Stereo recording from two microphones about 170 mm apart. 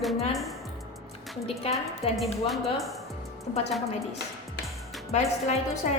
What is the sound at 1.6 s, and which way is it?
Speech, 35° left (ahead or behind).